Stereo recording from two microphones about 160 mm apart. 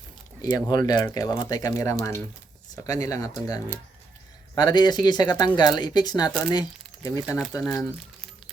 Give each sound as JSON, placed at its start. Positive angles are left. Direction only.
{"t": 0.4, "sound": "speech", "side_deg": 25}
{"t": 7.3, "sound": "speech", "side_deg": 0}
{"t": 7.7, "sound": "speech", "side_deg": 15}